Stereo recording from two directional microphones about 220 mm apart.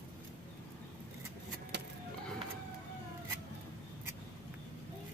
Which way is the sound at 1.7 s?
50° right (ahead or behind).